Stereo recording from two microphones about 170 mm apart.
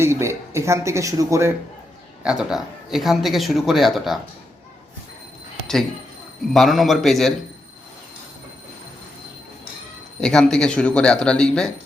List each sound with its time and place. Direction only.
0.0 s speech: 15° right (ahead or behind)
2.2 s speech: 5° right (ahead or behind)
6.5 s speech: centre (ahead or behind)
10.2 s speech: 5° left (ahead or behind)